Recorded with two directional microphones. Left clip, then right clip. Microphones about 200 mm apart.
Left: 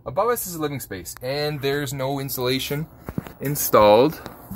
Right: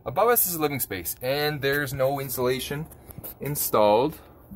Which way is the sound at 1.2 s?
10° right (ahead or behind).